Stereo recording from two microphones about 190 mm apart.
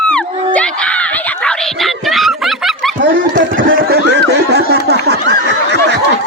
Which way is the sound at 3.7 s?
65° right (ahead or behind).